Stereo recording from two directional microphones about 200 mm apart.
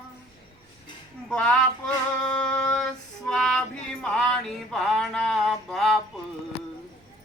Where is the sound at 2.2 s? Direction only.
5° left (ahead or behind).